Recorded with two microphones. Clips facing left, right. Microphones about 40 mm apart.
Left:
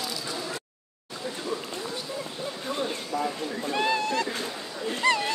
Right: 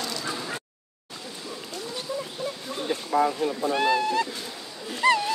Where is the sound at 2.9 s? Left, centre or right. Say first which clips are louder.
Right 6 dB; right.